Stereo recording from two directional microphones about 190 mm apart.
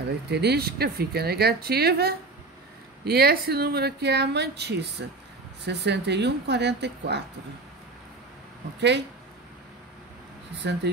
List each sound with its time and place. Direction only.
0.3 s speech: 60° right (ahead or behind)
10.6 s speech: 65° right (ahead or behind)